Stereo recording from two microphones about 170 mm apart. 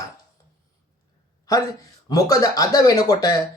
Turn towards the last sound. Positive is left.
turn(degrees=20)  # may be behind; listen again after turning